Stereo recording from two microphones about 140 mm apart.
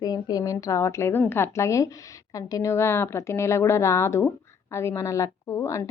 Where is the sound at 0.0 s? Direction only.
30° left (ahead or behind).